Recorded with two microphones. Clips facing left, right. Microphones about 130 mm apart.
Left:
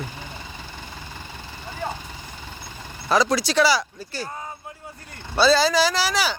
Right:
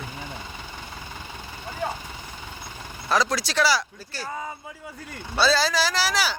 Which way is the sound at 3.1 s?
Centre (ahead or behind).